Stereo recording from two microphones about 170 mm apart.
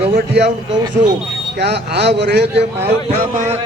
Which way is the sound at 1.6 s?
80° right.